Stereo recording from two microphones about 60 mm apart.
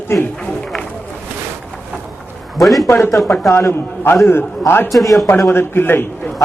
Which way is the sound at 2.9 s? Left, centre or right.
Left.